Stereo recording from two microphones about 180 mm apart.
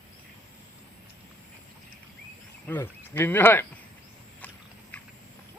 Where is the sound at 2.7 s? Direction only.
10° left (ahead or behind).